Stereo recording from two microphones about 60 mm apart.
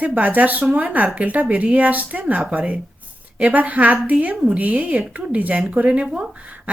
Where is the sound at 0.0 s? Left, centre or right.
Right.